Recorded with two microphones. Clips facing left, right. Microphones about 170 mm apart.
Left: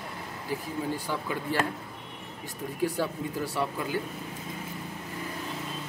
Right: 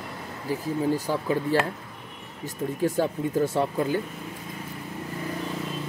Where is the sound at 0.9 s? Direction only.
40° right (ahead or behind).